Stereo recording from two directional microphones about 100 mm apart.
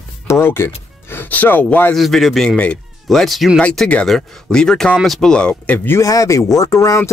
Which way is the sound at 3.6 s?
10° left (ahead or behind).